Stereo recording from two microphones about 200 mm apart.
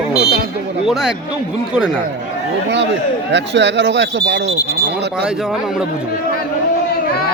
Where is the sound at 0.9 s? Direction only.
Centre (ahead or behind).